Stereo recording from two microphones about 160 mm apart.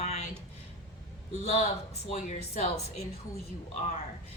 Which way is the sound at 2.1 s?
50° left (ahead or behind).